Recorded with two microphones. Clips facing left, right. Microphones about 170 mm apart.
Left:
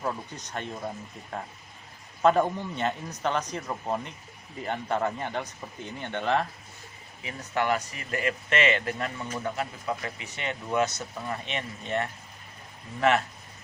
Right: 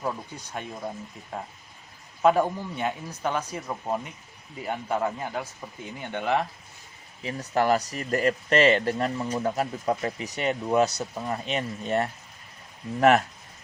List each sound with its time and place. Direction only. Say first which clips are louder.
0.0 s speech: right 1 dB; 5° right (ahead or behind)
7.2 s speech: right 4 dB; 35° right (ahead or behind)